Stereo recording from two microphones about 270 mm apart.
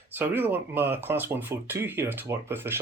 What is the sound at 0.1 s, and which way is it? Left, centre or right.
Speech, centre.